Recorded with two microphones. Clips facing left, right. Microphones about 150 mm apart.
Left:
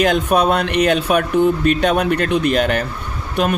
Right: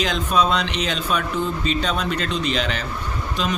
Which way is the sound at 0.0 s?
60° left (ahead or behind).